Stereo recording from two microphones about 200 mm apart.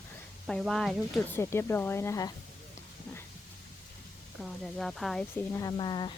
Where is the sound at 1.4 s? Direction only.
15° left (ahead or behind).